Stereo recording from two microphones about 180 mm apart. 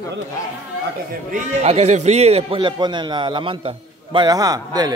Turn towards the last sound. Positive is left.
turn(degrees=-20)  # may be behind; listen again after turning